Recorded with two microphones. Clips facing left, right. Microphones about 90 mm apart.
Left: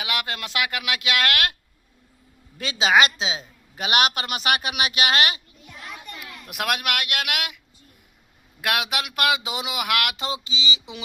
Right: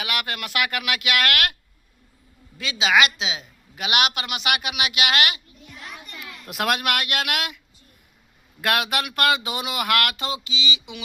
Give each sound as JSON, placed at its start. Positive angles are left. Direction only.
{"t": 0.0, "sound": "speech", "side_deg": 20}
{"t": 2.6, "sound": "a woman's voice", "side_deg": 40}
{"t": 6.5, "sound": "speech", "side_deg": 0}
{"t": 8.6, "sound": "speech", "side_deg": 10}
{"t": 10.2, "sound": "a woman's voice", "side_deg": 30}